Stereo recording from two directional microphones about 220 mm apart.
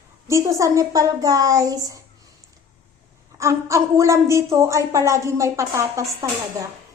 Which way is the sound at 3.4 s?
15° right (ahead or behind).